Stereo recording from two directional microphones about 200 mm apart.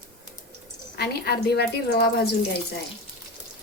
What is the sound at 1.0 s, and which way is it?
A woman's voice, 55° left (ahead or behind).